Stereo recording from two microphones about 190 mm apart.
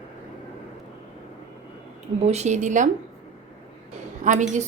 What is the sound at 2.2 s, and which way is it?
Speech, 35° right (ahead or behind).